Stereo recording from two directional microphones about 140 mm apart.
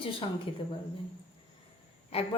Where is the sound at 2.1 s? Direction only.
45° left (ahead or behind).